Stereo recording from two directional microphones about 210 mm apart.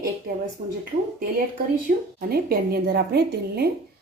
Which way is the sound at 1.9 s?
40° right (ahead or behind).